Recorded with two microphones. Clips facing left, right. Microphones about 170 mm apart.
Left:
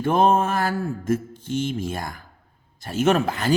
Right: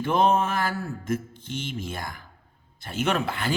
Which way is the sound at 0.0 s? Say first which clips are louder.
Left 3 dB; 50° left (ahead or behind).